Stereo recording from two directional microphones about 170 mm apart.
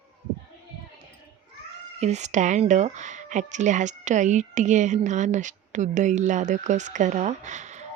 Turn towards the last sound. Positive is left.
turn(degrees=-45)  # may be behind; listen again after turning